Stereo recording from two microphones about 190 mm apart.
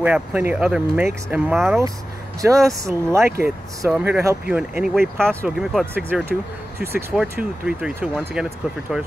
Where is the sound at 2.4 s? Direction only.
15° right (ahead or behind).